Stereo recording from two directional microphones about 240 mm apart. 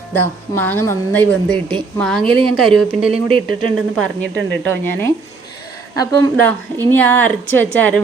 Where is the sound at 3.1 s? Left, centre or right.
Right.